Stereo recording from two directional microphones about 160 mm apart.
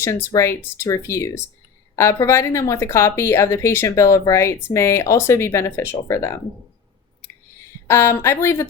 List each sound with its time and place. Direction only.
0.0 s speech: 15° left (ahead or behind)
7.9 s speech: 15° left (ahead or behind)